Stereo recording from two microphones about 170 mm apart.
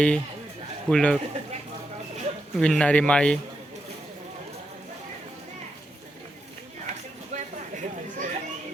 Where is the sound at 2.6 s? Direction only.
5° left (ahead or behind).